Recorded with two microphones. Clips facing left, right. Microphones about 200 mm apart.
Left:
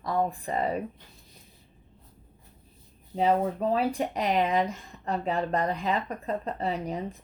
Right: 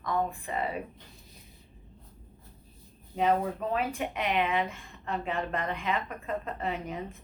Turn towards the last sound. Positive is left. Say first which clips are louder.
# left 3 dB
turn(degrees=35)  # may be behind; listen again after turning